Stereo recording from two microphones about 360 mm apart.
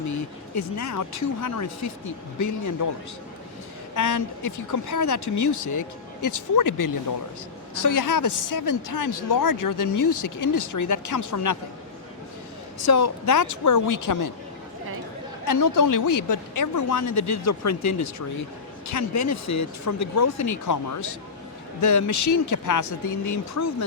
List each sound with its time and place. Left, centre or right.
0.8 s speech: left
3.9 s speech: left
12.8 s speech: left
15.4 s speech: left